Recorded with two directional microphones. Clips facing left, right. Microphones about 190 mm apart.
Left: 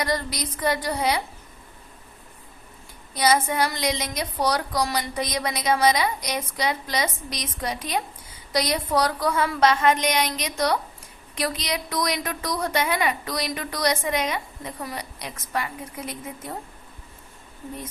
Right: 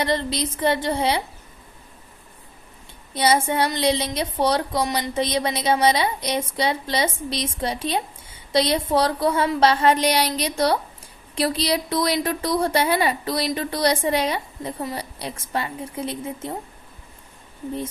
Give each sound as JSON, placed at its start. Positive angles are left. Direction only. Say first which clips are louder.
{"t": 0.0, "sound": "a woman's voice", "louder": "right 4 dB", "side_deg": -25}
{"t": 3.2, "sound": "a woman's voice", "louder": "right 2 dB", "side_deg": -30}